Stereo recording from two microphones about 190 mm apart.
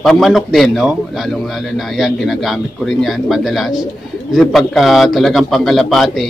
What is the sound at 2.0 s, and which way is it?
A man's voice, centre (ahead or behind).